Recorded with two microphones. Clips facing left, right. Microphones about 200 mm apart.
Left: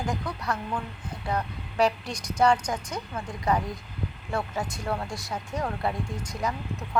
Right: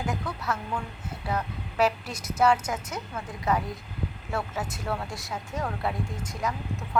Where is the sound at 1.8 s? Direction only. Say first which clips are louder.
Left 1 dB; 5° right (ahead or behind).